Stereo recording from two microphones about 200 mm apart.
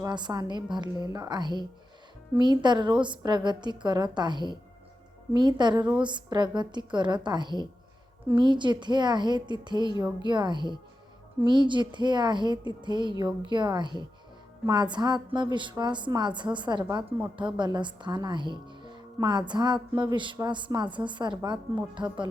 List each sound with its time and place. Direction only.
0.0 s speech: 20° right (ahead or behind)